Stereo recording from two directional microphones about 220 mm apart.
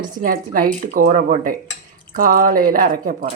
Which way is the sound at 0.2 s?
40° right (ahead or behind).